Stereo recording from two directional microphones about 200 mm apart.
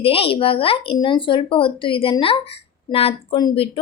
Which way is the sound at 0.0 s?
30° left (ahead or behind).